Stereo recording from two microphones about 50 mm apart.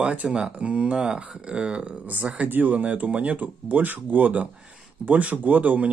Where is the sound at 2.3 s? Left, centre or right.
Right.